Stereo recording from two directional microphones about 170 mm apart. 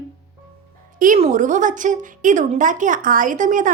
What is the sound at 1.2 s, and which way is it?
A woman's voice, 50° right (ahead or behind).